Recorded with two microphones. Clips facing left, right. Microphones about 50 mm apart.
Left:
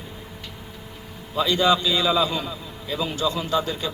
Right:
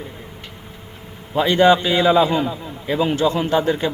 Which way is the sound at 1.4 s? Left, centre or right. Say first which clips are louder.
Right 6 dB; right.